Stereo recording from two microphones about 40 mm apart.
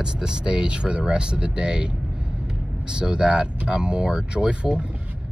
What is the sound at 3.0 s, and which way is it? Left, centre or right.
Speech, right.